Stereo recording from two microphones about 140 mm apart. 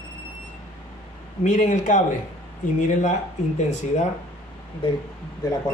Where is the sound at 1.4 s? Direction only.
60° left (ahead or behind).